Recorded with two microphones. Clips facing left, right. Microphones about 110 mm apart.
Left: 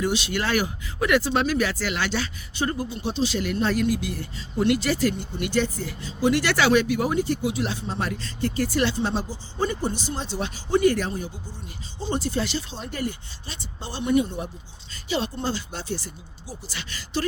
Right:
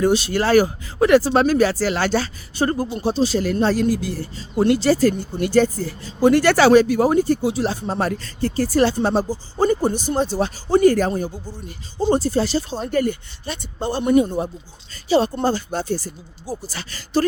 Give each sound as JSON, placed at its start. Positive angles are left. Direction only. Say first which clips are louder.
{"t": 0.0, "sound": "speech", "louder": "right 7 dB", "side_deg": -40}